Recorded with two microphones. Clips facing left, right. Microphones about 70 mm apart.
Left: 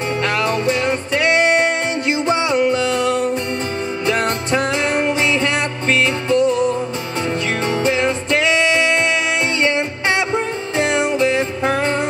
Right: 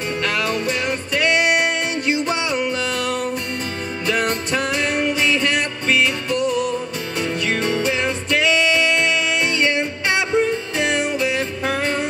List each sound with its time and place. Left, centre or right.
0.2 s music: left